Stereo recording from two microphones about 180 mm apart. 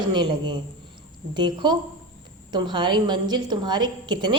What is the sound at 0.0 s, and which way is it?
A woman's voice, 25° right (ahead or behind).